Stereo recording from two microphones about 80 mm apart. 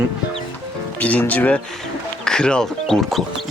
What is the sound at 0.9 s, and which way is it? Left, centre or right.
Speech, centre.